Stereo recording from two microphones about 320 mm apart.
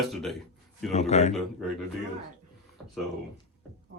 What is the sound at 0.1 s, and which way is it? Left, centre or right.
Speech, centre.